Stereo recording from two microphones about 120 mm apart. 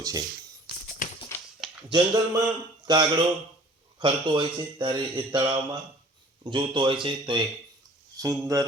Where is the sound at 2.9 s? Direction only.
40° right (ahead or behind).